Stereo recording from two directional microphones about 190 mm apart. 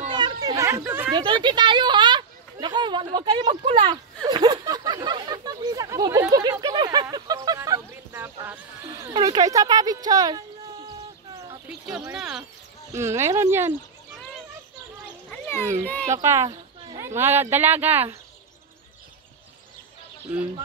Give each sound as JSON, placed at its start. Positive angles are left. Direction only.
{"t": 0.1, "sound": "children playing", "side_deg": -20}
{"t": 1.1, "sound": "speech", "side_deg": -25}
{"t": 9.1, "sound": "speech", "side_deg": -20}
{"t": 12.1, "sound": "speech", "side_deg": -5}
{"t": 12.9, "sound": "speech", "side_deg": -15}
{"t": 15.2, "sound": "a sound", "side_deg": 10}
{"t": 15.6, "sound": "speech", "side_deg": -15}
{"t": 16.4, "sound": "a sound", "side_deg": -25}
{"t": 17.0, "sound": "speech", "side_deg": -10}